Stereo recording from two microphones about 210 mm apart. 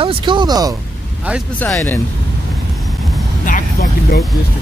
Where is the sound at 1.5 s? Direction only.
10° left (ahead or behind).